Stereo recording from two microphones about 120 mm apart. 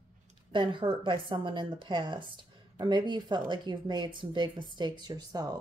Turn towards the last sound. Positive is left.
turn(degrees=-35)  # may be behind; listen again after turning